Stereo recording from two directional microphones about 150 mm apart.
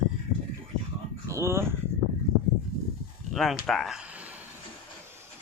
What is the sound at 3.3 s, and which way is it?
Speech, centre (ahead or behind).